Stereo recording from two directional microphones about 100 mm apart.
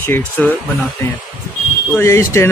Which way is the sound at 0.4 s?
15° left (ahead or behind).